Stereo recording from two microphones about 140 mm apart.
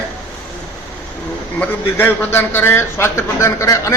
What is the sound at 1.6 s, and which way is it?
A man's voice, 15° left (ahead or behind).